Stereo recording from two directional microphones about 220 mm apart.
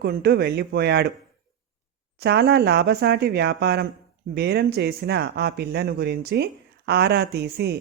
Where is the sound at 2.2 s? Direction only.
50° right (ahead or behind).